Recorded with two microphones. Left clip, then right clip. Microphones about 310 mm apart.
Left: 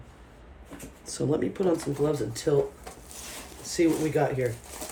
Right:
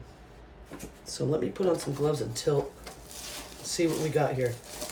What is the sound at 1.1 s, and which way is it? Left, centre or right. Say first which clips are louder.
Speech: left 2 dB; left.